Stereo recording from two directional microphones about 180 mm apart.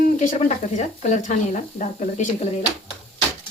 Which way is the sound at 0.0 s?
45° left (ahead or behind).